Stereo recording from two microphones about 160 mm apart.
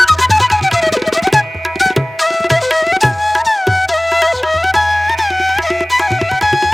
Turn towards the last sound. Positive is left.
turn(degrees=0)  # may be behind; listen again after turning